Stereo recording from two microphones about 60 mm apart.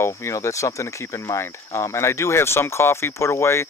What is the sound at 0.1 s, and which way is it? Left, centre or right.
Speech, left.